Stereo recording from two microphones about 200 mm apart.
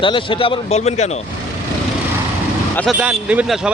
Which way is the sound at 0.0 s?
25° left (ahead or behind).